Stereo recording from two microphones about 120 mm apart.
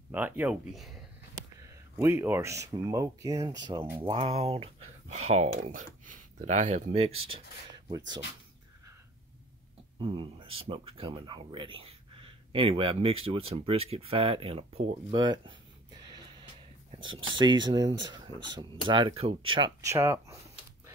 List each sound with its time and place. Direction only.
0.1 s speech: 15° right (ahead or behind)
1.6 s speech: 20° right (ahead or behind); by 7.4 s 55° right (ahead or behind)
7.7 s a sound: 35° right (ahead or behind)
9.9 s speech: 45° right (ahead or behind); by 15.1 s 60° right (ahead or behind)
15.1 s speech: 40° right (ahead or behind)
17.0 s speech: 40° right (ahead or behind)
19.8 s speech: 25° right (ahead or behind)